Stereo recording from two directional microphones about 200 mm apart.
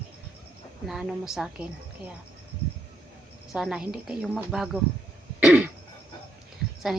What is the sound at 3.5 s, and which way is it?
A woman's voice, 5° right (ahead or behind).